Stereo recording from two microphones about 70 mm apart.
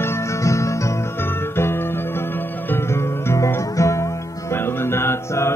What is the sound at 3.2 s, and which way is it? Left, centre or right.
Music, left.